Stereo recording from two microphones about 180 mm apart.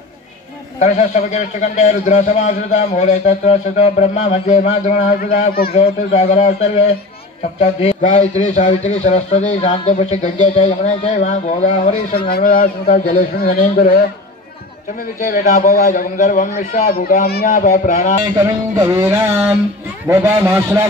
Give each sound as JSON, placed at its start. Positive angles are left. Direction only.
{"t": 0.7, "sound": "a man's voice", "side_deg": 40}
{"t": 5.8, "sound": "a man's voice", "side_deg": 35}
{"t": 12.1, "sound": "speech", "side_deg": 55}
{"t": 15.1, "sound": "speech", "side_deg": 50}
{"t": 18.8, "sound": "music", "side_deg": -10}